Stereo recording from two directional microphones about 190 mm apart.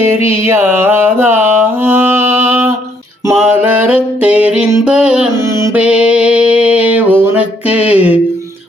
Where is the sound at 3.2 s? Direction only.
10° right (ahead or behind).